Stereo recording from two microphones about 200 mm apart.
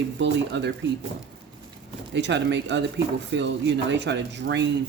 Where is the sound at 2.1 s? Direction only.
60° right (ahead or behind).